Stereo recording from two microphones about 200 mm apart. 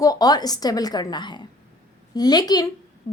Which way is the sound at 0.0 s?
20° left (ahead or behind).